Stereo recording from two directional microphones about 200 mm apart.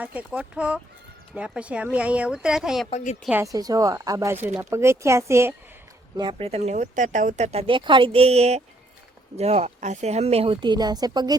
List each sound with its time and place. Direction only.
0.0 s speech: 5° right (ahead or behind)
2.9 s a woman's voice: 35° left (ahead or behind)
3.2 s speech: 15° right (ahead or behind)
6.1 s speech: 25° right (ahead or behind)